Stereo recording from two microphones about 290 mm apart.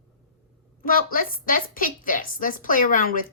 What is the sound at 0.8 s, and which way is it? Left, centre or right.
A woman's voice, left.